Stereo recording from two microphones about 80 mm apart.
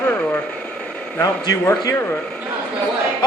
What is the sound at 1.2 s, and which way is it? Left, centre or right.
Speech, left.